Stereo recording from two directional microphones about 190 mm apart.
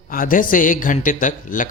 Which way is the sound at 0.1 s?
45° left (ahead or behind).